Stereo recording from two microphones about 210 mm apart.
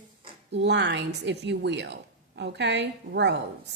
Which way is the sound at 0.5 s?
55° right (ahead or behind).